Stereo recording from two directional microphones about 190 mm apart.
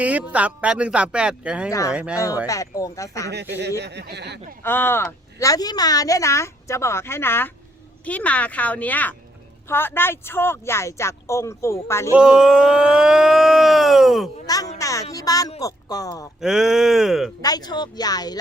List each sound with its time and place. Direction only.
0.0 s speech: 5° right (ahead or behind)
2.1 s a woman's voice: 15° left (ahead or behind)
3.8 s speech: 60° right (ahead or behind)
4.6 s a woman's voice: 10° left (ahead or behind)
12.1 s speech: 5° right (ahead or behind)
14.4 s a woman's voice: 20° left (ahead or behind)
16.4 s speech: 5° right (ahead or behind)
17.4 s speech: 20° left (ahead or behind)